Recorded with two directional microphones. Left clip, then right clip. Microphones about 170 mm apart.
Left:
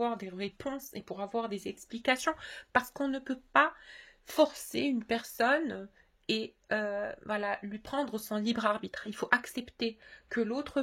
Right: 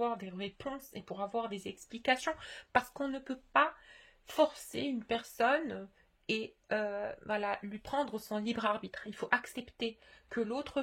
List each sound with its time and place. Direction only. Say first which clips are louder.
0.0 s speech: left 2 dB; 30° left (ahead or behind); by 8.1 s 15° left (ahead or behind)
8.1 s speech: left 3 dB; 25° left (ahead or behind)